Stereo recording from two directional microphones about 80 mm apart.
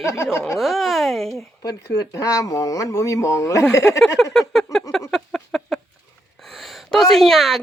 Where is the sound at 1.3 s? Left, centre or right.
Left.